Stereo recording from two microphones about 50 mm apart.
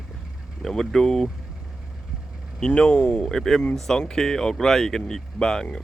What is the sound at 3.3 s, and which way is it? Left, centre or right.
Speech, centre.